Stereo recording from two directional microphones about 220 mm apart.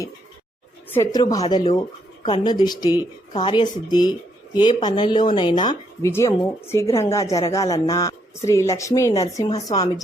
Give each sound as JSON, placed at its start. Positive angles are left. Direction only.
{"t": 0.9, "sound": "a man's voice", "side_deg": 15}